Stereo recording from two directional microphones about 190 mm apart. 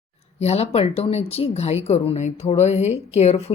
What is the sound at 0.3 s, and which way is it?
A woman's voice, 35° left (ahead or behind).